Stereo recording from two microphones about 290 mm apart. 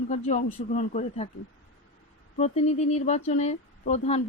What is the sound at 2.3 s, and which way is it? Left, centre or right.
Speech, left.